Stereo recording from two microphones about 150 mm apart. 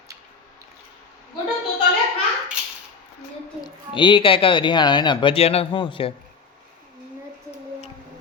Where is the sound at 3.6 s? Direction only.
30° left (ahead or behind).